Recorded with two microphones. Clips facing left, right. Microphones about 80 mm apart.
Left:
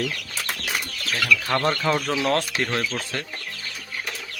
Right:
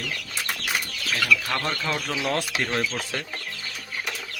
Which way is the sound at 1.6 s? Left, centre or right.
Left.